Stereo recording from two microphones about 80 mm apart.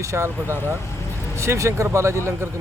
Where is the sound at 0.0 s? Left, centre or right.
Right.